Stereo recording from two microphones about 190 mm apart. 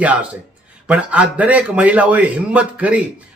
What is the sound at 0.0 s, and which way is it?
A man's voice, 10° right (ahead or behind).